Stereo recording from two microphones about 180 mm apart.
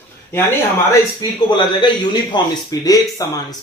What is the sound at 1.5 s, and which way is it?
Speech, 25° left (ahead or behind).